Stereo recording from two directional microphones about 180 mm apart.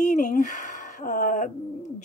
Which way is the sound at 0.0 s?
45° left (ahead or behind).